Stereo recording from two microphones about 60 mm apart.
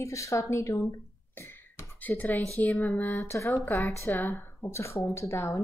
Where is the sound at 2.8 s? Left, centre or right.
Left.